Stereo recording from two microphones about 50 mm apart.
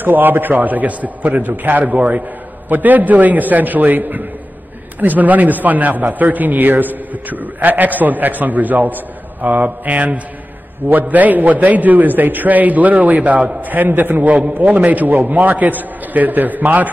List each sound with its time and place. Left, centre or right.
0.0 s a man's voice: right